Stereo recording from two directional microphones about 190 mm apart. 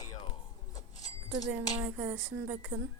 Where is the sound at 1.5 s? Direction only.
10° right (ahead or behind).